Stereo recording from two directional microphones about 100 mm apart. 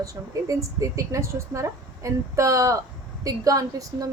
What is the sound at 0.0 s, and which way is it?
A woman's voice, 35° right (ahead or behind).